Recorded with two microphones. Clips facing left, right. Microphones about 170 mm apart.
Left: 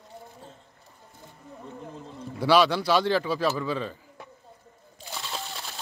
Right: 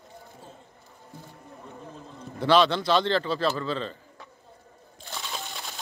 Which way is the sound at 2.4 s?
10° left (ahead or behind).